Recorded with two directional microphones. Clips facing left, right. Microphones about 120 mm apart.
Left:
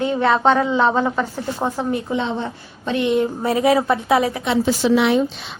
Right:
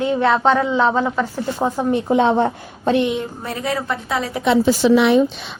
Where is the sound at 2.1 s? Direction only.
55° right (ahead or behind).